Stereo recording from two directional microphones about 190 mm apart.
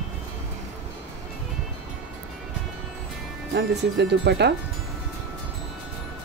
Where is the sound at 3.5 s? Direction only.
65° right (ahead or behind).